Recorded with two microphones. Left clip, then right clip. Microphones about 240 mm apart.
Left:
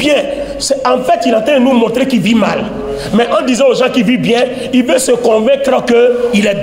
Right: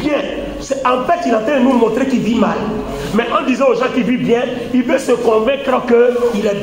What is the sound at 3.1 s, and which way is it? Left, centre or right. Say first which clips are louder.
A man's voice: left 4 dB; left.